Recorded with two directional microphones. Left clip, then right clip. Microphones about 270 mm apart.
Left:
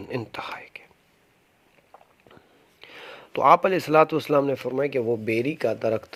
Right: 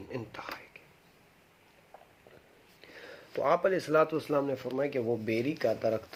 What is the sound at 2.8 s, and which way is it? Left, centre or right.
Speech, left.